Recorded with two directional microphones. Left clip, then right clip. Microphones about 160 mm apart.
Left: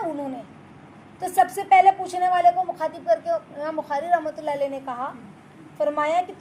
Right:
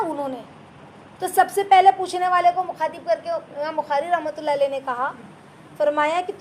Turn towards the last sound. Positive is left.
turn(degrees=-20)  # may be behind; listen again after turning